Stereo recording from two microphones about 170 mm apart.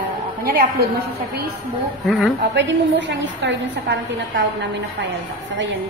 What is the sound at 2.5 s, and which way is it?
A woman's voice, 90° right.